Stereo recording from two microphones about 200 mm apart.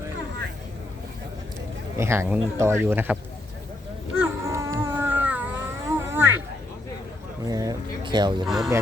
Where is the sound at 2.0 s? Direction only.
10° right (ahead or behind).